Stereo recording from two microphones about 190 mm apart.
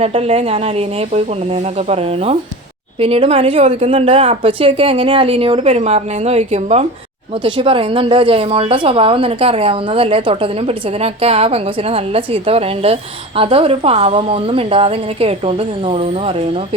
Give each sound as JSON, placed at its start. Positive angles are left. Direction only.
{"t": 0.0, "sound": "a woman's voice", "side_deg": -30}